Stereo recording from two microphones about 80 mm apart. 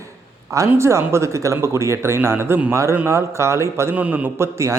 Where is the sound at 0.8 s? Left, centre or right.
Right.